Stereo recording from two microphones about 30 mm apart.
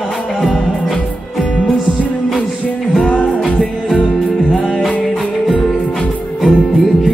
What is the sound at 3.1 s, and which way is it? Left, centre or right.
Music, left.